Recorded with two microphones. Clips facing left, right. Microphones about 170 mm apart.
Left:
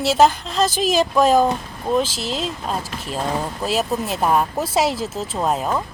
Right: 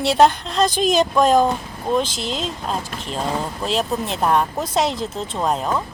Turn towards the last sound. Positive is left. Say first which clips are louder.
# even
turn(degrees=5)  # may be behind; listen again after turning